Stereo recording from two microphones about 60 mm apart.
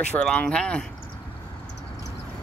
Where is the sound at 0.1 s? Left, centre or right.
Left.